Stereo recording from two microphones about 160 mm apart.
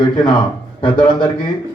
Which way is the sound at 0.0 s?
25° left (ahead or behind).